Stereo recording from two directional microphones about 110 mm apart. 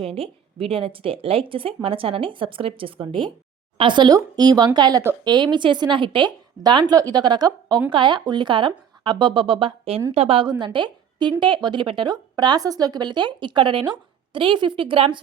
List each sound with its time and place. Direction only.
0.0 s a woman's voice: 60° right (ahead or behind)
10.4 s a woman's voice: 45° right (ahead or behind)